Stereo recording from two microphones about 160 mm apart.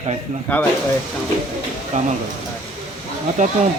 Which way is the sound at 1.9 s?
50° right (ahead or behind).